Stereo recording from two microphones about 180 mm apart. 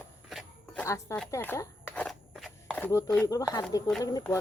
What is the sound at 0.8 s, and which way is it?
Speech, 15° left (ahead or behind).